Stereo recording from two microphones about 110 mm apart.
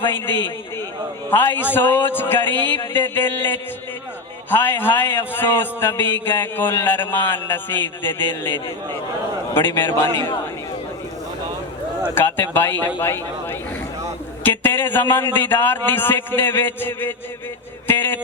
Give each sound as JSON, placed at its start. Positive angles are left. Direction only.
{"t": 1.3, "sound": "a man's voice", "side_deg": 20}
{"t": 12.1, "sound": "a man's voice", "side_deg": 20}
{"t": 17.8, "sound": "a sound", "side_deg": 20}